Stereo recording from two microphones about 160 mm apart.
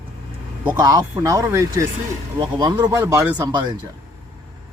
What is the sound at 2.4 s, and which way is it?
Speech, 30° right (ahead or behind).